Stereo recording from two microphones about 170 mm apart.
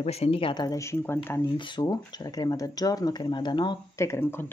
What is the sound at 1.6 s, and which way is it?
Speech, 25° left (ahead or behind).